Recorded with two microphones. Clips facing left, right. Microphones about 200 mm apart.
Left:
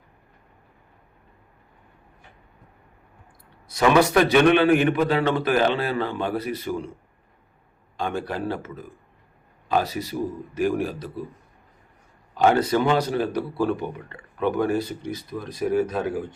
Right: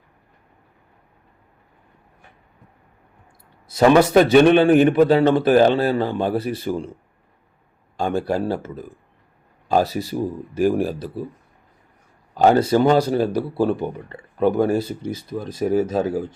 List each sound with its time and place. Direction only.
3.7 s a man's voice: 25° right (ahead or behind)
7.9 s a man's voice: 35° right (ahead or behind)
12.3 s a man's voice: 35° right (ahead or behind)